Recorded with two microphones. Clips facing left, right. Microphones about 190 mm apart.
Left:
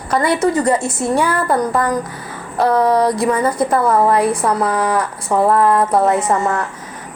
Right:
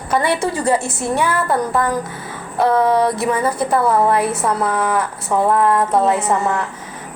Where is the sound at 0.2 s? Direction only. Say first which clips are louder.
Left 3 dB; 25° right (ahead or behind).